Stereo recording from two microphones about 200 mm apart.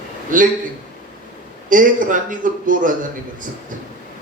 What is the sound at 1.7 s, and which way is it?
A man's voice, 40° right (ahead or behind).